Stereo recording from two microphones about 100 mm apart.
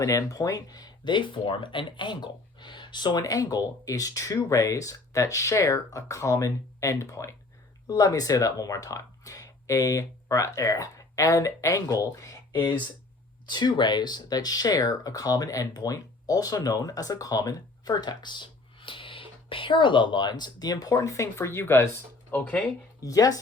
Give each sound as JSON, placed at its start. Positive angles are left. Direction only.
{"t": 0.0, "sound": "speech", "side_deg": 35}
{"t": 13.5, "sound": "speech", "side_deg": 45}
{"t": 23.0, "sound": "speech", "side_deg": 35}